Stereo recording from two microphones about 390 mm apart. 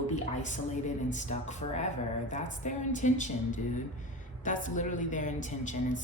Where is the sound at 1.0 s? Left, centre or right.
Centre.